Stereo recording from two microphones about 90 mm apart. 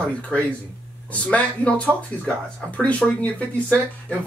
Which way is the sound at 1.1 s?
15° left (ahead or behind).